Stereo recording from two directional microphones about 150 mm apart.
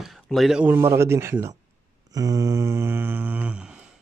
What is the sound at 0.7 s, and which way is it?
Speech, 15° right (ahead or behind).